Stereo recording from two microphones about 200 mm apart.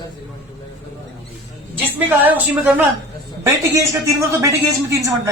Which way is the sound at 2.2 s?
10° right (ahead or behind).